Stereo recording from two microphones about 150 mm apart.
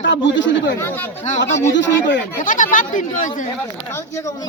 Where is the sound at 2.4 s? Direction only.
60° left (ahead or behind).